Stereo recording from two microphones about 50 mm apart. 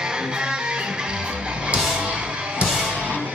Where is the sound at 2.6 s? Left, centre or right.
Centre.